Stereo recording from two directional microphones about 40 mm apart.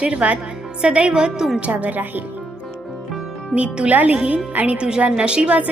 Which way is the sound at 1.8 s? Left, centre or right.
Right.